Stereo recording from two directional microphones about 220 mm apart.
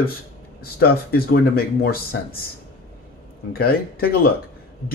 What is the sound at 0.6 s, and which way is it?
Speech, 45° left (ahead or behind).